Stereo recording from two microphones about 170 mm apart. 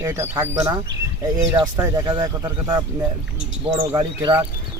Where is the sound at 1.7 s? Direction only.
20° right (ahead or behind).